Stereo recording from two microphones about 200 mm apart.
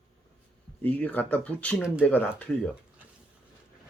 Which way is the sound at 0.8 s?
10° left (ahead or behind).